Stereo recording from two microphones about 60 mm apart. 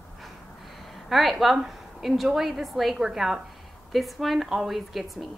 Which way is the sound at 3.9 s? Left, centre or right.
Centre.